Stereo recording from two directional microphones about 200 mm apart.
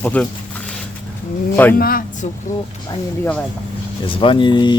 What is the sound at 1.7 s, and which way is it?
Speech, 45° left (ahead or behind).